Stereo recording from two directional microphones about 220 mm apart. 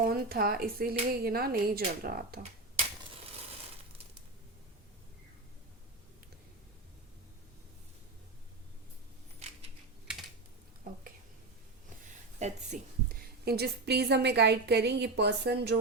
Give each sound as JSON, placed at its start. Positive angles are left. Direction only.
{"t": 0.0, "sound": "a woman's voice", "side_deg": -40}
{"t": 9.4, "sound": "scissors", "side_deg": -30}
{"t": 12.4, "sound": "a sound", "side_deg": -30}
{"t": 13.4, "sound": "a woman's voice", "side_deg": -45}